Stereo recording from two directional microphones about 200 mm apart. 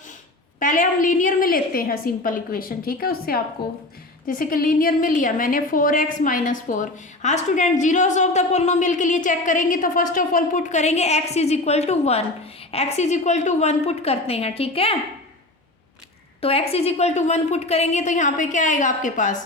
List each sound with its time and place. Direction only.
0.6 s a woman's voice: 40° left (ahead or behind)
16.4 s a woman's voice: 30° left (ahead or behind)